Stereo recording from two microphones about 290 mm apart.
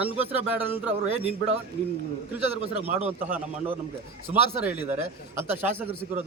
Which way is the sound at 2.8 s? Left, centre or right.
Right.